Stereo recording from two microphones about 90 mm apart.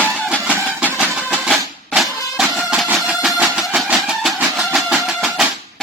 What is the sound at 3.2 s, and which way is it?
Vehicle, 5° right (ahead or behind).